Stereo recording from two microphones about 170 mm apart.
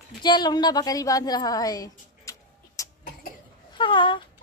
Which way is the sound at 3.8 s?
30° left (ahead or behind).